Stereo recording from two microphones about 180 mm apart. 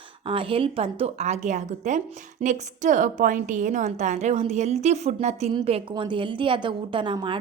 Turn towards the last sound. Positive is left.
turn(degrees=-25)  # may be behind; listen again after turning